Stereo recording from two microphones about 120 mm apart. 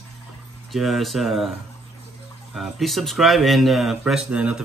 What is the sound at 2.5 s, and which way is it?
Speech, centre (ahead or behind).